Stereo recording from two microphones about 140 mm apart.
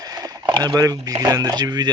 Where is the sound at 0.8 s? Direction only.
25° right (ahead or behind).